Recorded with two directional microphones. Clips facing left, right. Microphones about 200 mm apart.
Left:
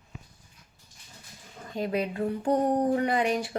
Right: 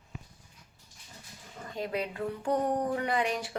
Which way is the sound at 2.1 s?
35° left (ahead or behind).